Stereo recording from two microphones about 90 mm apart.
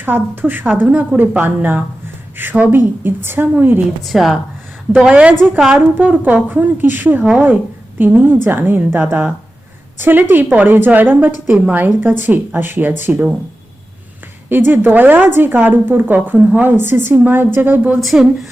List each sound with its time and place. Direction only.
0.0 s a woman's voice: 20° right (ahead or behind)
4.0 s a woman's voice: centre (ahead or behind)
4.9 s a woman's voice: 10° right (ahead or behind)
6.0 s a woman's voice: 20° right (ahead or behind)
14.5 s a woman's voice: 20° right (ahead or behind)
18.0 s a woman's voice: centre (ahead or behind)